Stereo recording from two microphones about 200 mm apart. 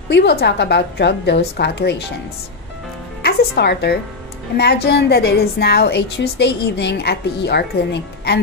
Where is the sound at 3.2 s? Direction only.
55° left (ahead or behind).